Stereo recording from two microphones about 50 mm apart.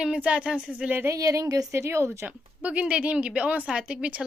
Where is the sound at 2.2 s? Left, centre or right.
Right.